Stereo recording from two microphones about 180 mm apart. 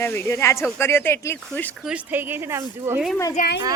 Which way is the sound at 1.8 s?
10° right (ahead or behind).